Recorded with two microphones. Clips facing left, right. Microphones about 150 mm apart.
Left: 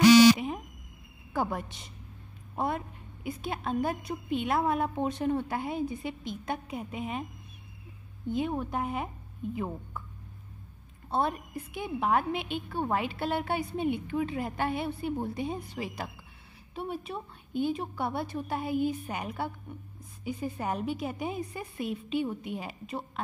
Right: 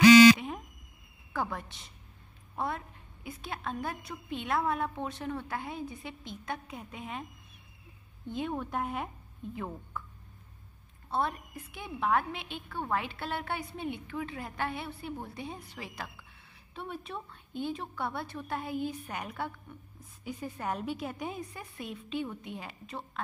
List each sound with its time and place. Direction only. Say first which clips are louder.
1.3 s a woman's voice: left 4 dB; 15° left (ahead or behind)
8.3 s a woman's voice: left 4 dB; 5° left (ahead or behind)
11.1 s a woman's voice: left 3 dB; 20° left (ahead or behind)